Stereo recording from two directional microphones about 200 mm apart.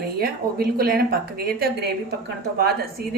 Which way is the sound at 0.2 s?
50° right (ahead or behind).